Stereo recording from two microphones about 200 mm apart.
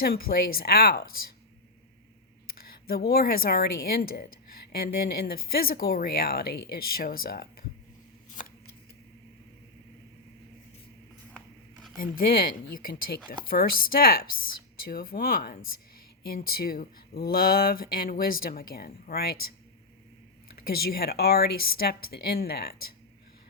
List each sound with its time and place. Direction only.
0.0 s speech: 50° left (ahead or behind)
2.8 s speech: 50° left (ahead or behind)
11.9 s speech: 45° left (ahead or behind)
20.7 s speech: 50° left (ahead or behind)